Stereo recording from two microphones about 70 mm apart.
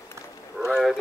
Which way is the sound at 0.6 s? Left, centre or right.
Centre.